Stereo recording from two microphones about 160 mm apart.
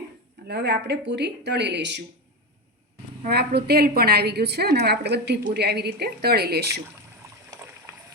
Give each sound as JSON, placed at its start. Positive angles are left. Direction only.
{"t": 0.4, "sound": "speech", "side_deg": -90}
{"t": 3.2, "sound": "a woman's voice", "side_deg": -85}